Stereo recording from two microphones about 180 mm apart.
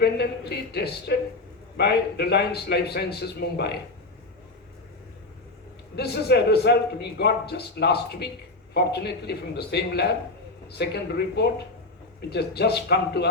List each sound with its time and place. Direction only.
0.0 s a man's voice: 65° left (ahead or behind)
6.0 s a man's voice: 65° left (ahead or behind)